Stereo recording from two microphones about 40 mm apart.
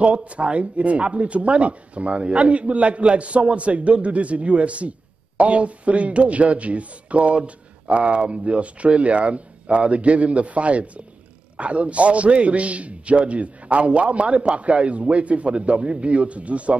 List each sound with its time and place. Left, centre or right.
0.0 s speech: right